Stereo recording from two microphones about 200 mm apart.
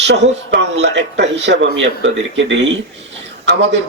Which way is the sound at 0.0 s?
60° right (ahead or behind).